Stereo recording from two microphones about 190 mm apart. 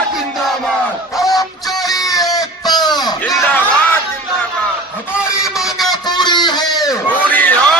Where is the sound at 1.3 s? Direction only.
20° left (ahead or behind).